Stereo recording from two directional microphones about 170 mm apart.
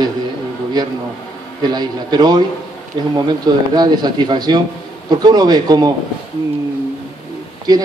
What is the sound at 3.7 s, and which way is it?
A man's voice, 25° right (ahead or behind).